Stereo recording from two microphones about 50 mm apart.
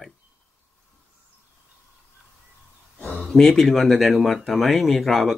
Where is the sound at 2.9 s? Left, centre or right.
Left.